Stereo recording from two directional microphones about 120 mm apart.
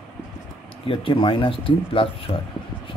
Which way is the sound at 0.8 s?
45° left (ahead or behind).